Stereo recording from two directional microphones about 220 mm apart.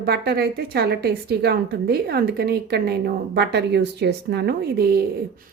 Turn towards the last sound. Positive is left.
turn(degrees=-45)  # may be behind; listen again after turning